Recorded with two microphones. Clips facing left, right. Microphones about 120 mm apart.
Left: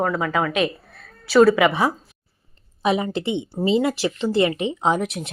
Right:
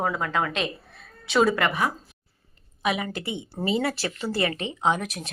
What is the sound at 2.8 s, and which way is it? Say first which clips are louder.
A woman's voice: left 6 dB; 30° left (ahead or behind).